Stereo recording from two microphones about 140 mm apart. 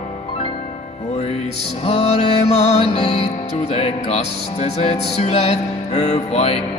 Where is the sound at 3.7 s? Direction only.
45° left (ahead or behind).